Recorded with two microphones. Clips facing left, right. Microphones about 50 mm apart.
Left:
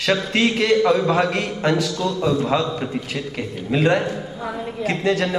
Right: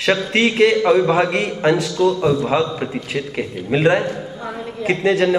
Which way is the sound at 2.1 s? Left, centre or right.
Right.